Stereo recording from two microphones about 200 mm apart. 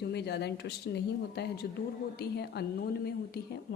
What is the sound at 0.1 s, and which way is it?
A woman's voice, 55° left (ahead or behind).